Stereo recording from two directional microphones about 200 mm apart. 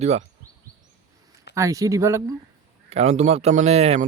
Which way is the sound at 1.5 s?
15° right (ahead or behind).